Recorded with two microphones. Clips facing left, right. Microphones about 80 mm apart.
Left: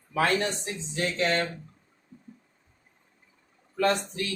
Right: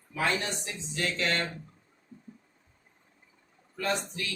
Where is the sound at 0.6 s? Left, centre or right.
Left.